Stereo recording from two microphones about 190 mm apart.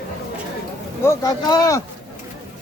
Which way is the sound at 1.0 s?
20° left (ahead or behind).